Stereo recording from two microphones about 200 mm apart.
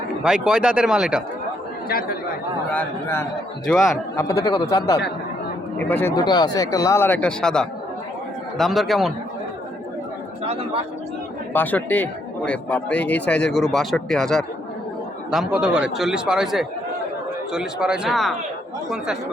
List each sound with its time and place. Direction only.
0.2 s a man's voice: 5° right (ahead or behind)
1.9 s speech: 50° left (ahead or behind)
2.7 s a man's voice: 10° left (ahead or behind)
4.3 s a man's voice: 15° left (ahead or behind)
5.7 s a man's voice: 10° left (ahead or behind)
10.4 s speech: 30° right (ahead or behind)
11.5 s a man's voice: 10° left (ahead or behind)